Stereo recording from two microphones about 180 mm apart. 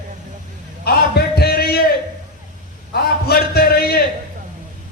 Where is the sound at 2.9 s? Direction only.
60° left (ahead or behind).